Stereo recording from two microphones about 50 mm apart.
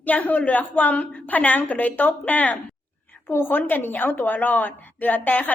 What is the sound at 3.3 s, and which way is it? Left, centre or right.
A woman's voice, left.